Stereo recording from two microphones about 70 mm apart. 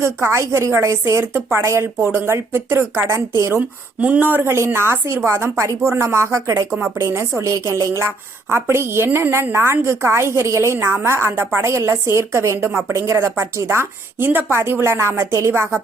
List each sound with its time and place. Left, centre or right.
0.0 s a woman's voice: right
3.6 s speech: right
4.4 s a woman's voice: right
6.7 s a woman's voice: centre
7.0 s a woman's voice: right
12.5 s speech: right
12.9 s a woman's voice: right